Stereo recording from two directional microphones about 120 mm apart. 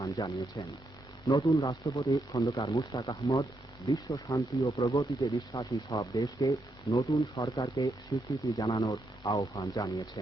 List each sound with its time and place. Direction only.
0.0 s speech: 30° left (ahead or behind)